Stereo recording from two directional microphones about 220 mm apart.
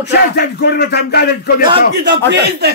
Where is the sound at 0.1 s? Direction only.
45° left (ahead or behind).